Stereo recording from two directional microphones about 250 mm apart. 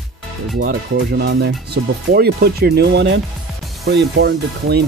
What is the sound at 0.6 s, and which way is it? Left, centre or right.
Speech, right.